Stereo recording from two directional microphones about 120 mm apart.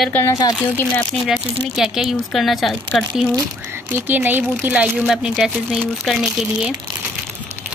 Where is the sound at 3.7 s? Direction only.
15° right (ahead or behind).